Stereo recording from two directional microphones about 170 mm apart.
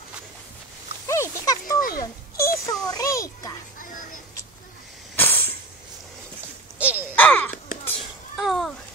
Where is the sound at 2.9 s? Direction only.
20° left (ahead or behind).